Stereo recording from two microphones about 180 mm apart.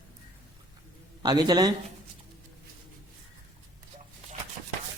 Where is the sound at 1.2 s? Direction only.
20° right (ahead or behind).